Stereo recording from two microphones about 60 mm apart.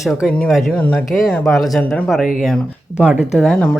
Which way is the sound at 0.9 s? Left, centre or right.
Centre.